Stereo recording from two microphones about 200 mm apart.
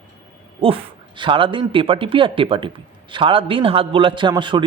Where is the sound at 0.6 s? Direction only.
25° right (ahead or behind).